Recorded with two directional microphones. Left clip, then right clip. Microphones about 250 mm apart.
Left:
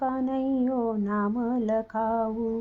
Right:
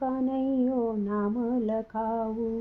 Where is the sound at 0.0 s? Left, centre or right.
Left.